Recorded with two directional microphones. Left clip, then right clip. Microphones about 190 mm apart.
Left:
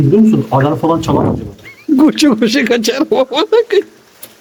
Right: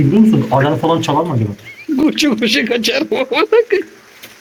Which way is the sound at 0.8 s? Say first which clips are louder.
Left 1 dB; 10° right (ahead or behind).